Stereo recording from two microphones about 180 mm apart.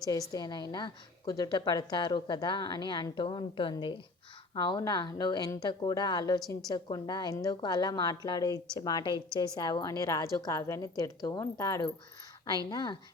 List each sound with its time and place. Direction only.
0.0 s a woman's voice: 20° left (ahead or behind)